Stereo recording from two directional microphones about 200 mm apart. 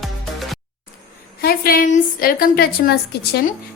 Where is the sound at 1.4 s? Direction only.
50° left (ahead or behind).